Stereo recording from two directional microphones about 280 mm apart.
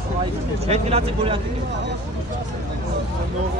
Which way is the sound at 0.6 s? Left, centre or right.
Right.